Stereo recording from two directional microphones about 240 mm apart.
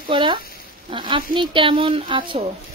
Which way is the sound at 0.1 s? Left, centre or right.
Centre.